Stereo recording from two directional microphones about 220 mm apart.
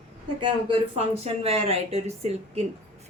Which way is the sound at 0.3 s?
25° right (ahead or behind).